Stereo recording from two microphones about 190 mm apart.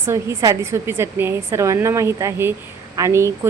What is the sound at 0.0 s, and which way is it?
A woman's voice, 15° right (ahead or behind).